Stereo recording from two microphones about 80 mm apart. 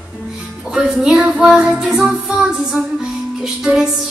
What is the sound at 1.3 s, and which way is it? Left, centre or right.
Child singing, centre.